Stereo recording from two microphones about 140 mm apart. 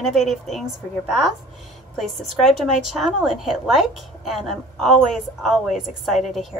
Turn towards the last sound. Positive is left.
turn(degrees=0)  # may be behind; listen again after turning